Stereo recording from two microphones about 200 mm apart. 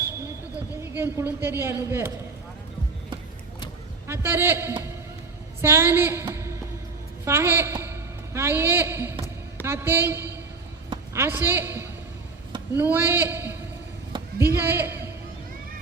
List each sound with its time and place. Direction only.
0.8 s a woman's voice: 10° right (ahead or behind)
4.0 s a man's voice: 10° right (ahead or behind)
14.1 s a sound: 20° right (ahead or behind)
14.5 s a woman's voice: 10° right (ahead or behind)